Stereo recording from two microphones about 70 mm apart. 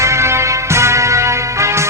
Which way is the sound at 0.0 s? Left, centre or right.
Right.